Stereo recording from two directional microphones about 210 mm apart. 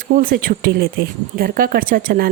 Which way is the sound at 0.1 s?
40° right (ahead or behind).